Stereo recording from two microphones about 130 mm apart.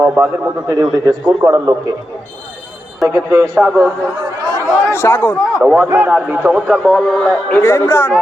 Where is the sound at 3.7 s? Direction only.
30° right (ahead or behind).